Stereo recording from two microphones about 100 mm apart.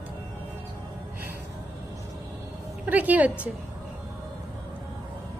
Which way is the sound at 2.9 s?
15° right (ahead or behind).